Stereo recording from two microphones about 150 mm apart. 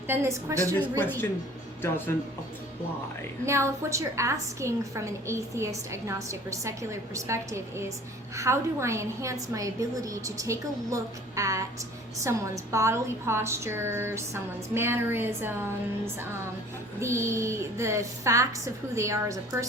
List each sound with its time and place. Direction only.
0.1 s a woman's voice: 15° right (ahead or behind)
0.9 s speech: 15° left (ahead or behind)
3.4 s a woman's voice: 20° right (ahead or behind)
17.0 s a woman's voice: 20° right (ahead or behind)